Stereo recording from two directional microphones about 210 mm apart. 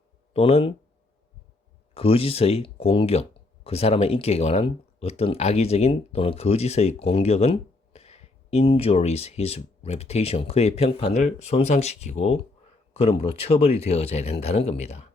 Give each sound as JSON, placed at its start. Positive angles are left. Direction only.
{"t": 0.3, "sound": "speech", "side_deg": 30}
{"t": 1.9, "sound": "speech", "side_deg": 25}